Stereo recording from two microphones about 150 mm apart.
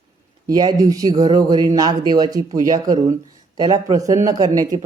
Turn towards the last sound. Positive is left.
turn(degrees=-25)  # may be behind; listen again after turning